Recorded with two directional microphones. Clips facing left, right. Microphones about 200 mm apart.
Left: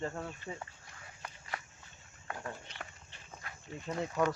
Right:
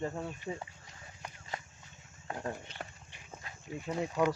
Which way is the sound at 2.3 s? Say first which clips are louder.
Right 4 dB; 30° right (ahead or behind).